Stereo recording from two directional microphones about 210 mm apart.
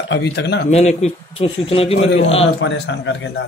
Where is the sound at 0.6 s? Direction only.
30° left (ahead or behind).